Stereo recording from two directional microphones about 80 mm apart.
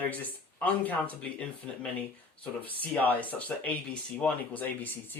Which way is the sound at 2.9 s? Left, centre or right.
Left.